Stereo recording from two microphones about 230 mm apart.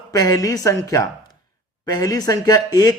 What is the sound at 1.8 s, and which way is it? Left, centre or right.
Speech, centre.